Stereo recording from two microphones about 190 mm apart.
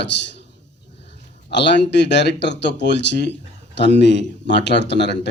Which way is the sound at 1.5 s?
65° left (ahead or behind).